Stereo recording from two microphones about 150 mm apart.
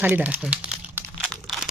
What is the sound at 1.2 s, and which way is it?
Crumpling, centre (ahead or behind).